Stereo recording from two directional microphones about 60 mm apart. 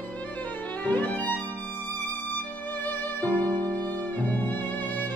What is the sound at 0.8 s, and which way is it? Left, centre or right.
Violin, left.